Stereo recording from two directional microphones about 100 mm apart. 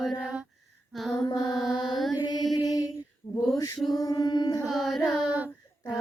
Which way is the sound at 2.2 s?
45° left (ahead or behind).